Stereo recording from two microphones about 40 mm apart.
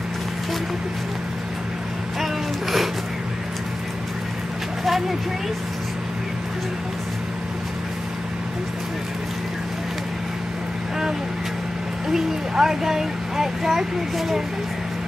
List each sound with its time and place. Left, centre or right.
12.1 s speech: centre